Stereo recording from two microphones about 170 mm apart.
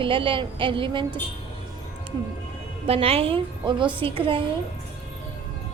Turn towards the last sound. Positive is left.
turn(degrees=-30)  # may be behind; listen again after turning